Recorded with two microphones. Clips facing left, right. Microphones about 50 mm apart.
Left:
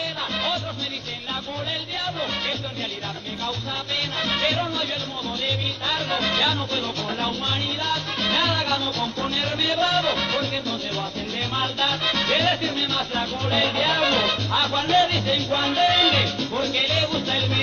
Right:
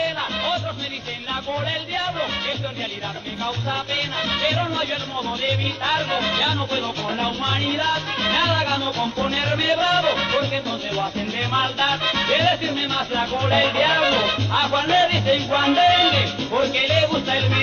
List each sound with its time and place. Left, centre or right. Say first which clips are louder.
4.3 s music: right 1 dB; centre
5.9 s music: right 3 dB; right
6.7 s music: right 2 dB; right
8.3 s music: right 2 dB; centre
9.3 s music: right 4 dB; right
9.9 s music: right 3 dB; centre
11.1 s music: right 4 dB; right
12.1 s music: right 1 dB; centre
14.0 s music: right 2 dB; centre
16.0 s music: right 2 dB; centre
16.3 s music: right 4 dB; right